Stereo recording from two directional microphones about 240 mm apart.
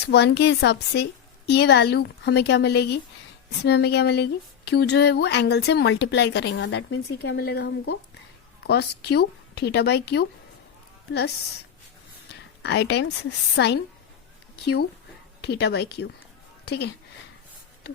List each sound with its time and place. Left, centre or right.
0.0 s speech: left
12.6 s speech: left
15.4 s speech: left